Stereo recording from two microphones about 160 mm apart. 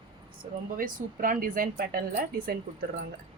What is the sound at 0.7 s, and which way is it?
A woman's voice, 60° right (ahead or behind).